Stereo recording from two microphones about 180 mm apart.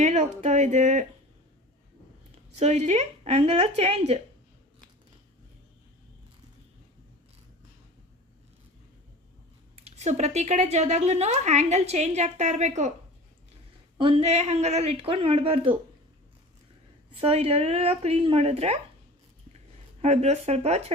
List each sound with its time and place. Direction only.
0.0 s speech: 40° right (ahead or behind)
2.6 s a woman's voice: 35° right (ahead or behind)
9.7 s a woman's voice: 35° right (ahead or behind)
14.0 s a woman's voice: 35° right (ahead or behind)
17.2 s a woman's voice: 35° right (ahead or behind)
20.0 s a woman's voice: 35° right (ahead or behind)